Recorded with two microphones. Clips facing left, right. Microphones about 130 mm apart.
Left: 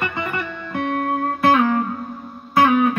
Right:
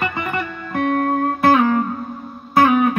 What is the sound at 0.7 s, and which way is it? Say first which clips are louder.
Music: right 4 dB; 55° right (ahead or behind).